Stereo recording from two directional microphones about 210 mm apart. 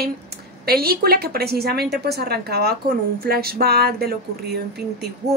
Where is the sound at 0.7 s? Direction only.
45° right (ahead or behind).